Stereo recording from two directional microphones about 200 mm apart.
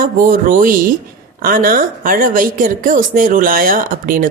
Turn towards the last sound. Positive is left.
turn(degrees=-45)  # may be behind; listen again after turning